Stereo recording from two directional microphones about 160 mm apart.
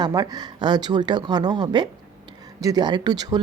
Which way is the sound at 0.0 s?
25° right (ahead or behind).